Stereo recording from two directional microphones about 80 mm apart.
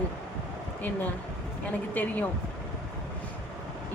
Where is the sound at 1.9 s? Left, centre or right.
Centre.